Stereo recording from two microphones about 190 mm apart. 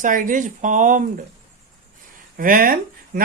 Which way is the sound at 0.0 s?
45° right (ahead or behind).